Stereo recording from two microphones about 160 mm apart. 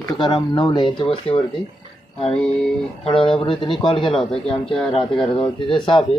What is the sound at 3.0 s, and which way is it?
Speech, 35° left (ahead or behind).